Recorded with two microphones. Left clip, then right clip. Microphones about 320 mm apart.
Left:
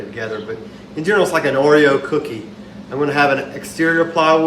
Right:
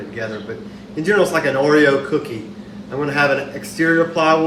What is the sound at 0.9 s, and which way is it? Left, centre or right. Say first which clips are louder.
Speech: even; centre.